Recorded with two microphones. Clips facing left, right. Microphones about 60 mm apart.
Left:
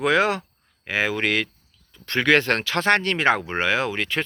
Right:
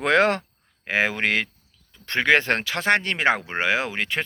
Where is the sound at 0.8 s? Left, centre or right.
Right.